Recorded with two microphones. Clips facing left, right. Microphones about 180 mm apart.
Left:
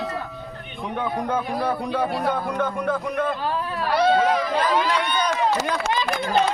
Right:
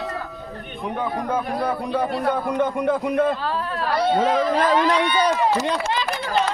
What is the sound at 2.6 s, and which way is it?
Speech, 20° right (ahead or behind).